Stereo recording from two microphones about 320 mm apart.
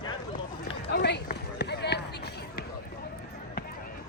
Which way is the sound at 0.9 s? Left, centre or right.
Left.